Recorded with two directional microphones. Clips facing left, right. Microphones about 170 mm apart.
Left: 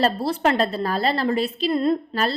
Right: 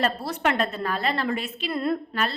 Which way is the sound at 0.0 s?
30° left (ahead or behind).